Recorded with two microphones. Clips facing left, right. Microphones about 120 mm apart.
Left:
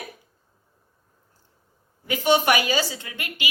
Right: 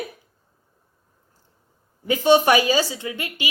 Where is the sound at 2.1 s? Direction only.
25° right (ahead or behind).